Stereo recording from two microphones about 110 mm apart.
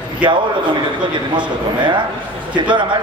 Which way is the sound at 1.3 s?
45° right (ahead or behind).